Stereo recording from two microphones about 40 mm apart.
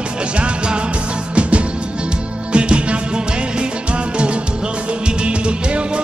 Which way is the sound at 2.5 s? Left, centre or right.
Right.